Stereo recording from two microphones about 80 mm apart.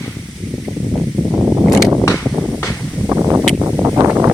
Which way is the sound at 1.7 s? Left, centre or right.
Centre.